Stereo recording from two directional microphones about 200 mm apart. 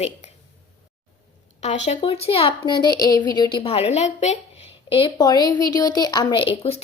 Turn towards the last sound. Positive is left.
turn(degrees=30)  # may be behind; listen again after turning